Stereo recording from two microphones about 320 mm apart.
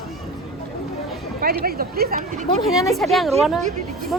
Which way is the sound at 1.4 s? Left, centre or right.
Right.